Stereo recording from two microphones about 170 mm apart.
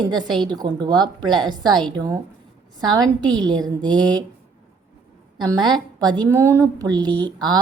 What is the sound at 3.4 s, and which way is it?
Speech, 25° right (ahead or behind).